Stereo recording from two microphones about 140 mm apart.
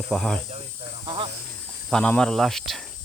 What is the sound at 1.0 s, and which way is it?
Snake, 40° right (ahead or behind).